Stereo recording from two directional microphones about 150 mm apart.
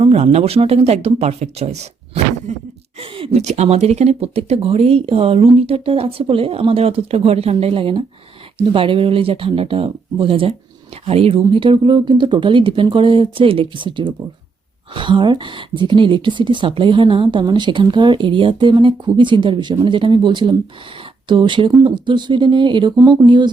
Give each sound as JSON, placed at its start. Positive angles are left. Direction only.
{"t": 0.0, "sound": "speech", "side_deg": -45}